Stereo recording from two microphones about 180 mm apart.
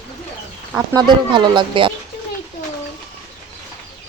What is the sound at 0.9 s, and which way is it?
Speech, 25° right (ahead or behind).